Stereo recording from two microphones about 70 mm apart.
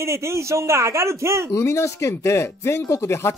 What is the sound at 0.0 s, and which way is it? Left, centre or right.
Speech, right.